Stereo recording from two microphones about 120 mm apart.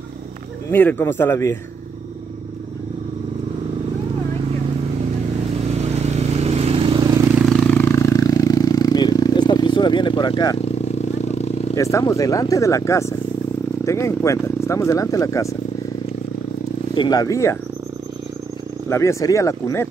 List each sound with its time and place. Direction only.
0.7 s speech: 15° left (ahead or behind)
5.9 s vehicle: 65° right (ahead or behind)
7.4 s a sound: 5° left (ahead or behind)
7.7 s a sound: 15° left (ahead or behind); by 10.6 s 35° left (ahead or behind)
11.0 s vehicle: 65° left (ahead or behind)
11.7 s speech: 25° left (ahead or behind)
16.9 s speech: 35° left (ahead or behind)
18.9 s speech: 25° left (ahead or behind)